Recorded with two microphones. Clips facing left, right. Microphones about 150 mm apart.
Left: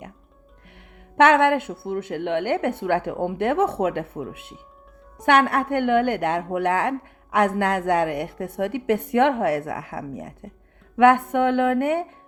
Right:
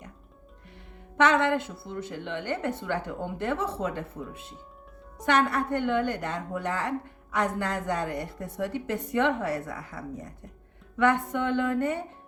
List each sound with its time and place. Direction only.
1.1 s a woman's voice: 60° left (ahead or behind)